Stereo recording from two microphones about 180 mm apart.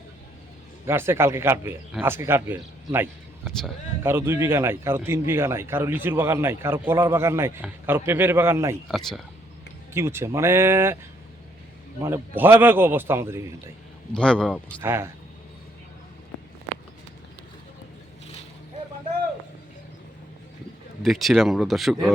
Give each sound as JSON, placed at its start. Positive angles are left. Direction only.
{"t": 0.9, "sound": "a man's voice", "side_deg": -15}
{"t": 8.9, "sound": "speech", "side_deg": 0}
{"t": 9.9, "sound": "a man's voice", "side_deg": -15}
{"t": 12.0, "sound": "a man's voice", "side_deg": -10}
{"t": 14.1, "sound": "speech", "side_deg": 5}
{"t": 14.8, "sound": "a man's voice", "side_deg": -15}
{"t": 21.0, "sound": "speech", "side_deg": 0}